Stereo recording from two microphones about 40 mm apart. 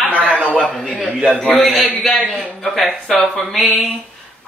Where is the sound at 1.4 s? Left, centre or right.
Centre.